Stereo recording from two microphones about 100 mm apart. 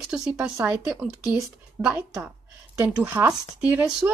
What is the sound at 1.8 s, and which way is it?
A woman's voice, 30° right (ahead or behind).